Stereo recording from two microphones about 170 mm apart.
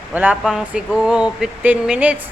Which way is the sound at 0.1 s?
10° right (ahead or behind).